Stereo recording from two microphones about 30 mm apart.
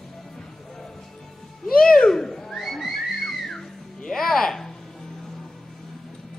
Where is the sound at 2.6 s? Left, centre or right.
Centre.